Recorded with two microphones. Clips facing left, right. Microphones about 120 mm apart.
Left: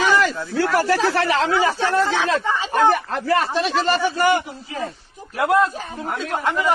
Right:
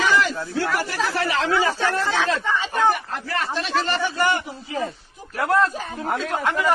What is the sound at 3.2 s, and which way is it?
Speech, 30° left (ahead or behind).